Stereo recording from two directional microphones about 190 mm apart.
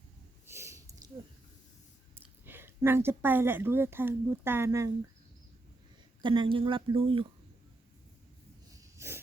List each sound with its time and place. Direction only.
0.4 s snort: 15° right (ahead or behind)
2.1 s a woman's voice: 10° right (ahead or behind)
6.2 s speech: 25° right (ahead or behind)
8.8 s snort: 15° right (ahead or behind)